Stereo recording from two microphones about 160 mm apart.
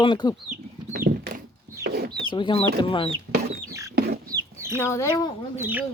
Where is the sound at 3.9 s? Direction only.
80° right.